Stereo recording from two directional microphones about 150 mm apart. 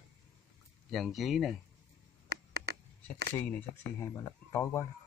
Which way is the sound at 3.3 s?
10° left (ahead or behind).